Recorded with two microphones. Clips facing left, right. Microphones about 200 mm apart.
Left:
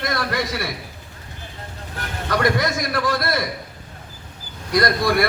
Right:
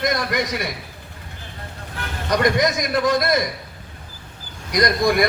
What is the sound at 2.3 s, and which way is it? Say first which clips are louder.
A man's voice: right 2 dB; 20° right (ahead or behind).